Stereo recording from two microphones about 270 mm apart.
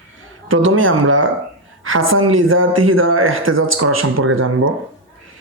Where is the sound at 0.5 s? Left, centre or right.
Right.